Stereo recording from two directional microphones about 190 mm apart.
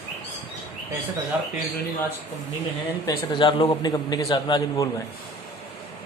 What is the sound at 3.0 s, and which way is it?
A man's voice, 25° left (ahead or behind).